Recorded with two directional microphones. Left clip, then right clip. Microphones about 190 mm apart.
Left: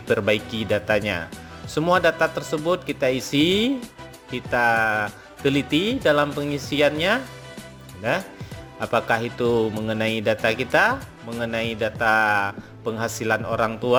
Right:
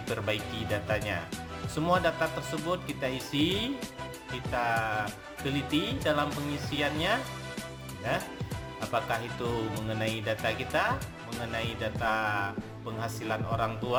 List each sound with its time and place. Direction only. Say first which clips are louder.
0.1 s speech: left 12 dB; 35° left (ahead or behind)
8.8 s speech: left 9 dB; 35° left (ahead or behind)